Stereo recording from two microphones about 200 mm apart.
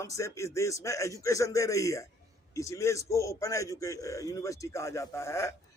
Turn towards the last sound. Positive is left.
turn(degrees=15)  # may be behind; listen again after turning